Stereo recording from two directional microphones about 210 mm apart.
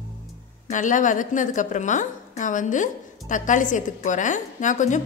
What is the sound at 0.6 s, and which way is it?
A woman's voice, 40° left (ahead or behind).